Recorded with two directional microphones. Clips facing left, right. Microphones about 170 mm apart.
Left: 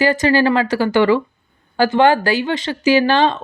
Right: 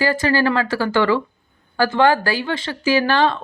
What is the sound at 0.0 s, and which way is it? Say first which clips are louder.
A woman's voice: left 3 dB; 20° left (ahead or behind).